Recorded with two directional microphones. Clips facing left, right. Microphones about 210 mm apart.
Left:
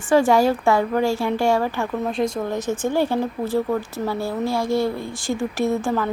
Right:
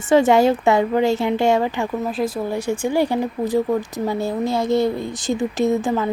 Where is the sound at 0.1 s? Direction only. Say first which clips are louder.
Right 2 dB; 20° right (ahead or behind).